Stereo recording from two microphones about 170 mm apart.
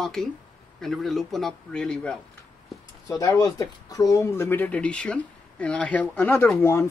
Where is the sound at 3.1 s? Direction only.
20° left (ahead or behind).